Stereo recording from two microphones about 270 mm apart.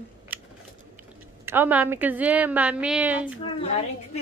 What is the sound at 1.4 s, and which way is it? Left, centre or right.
A woman's voice, centre.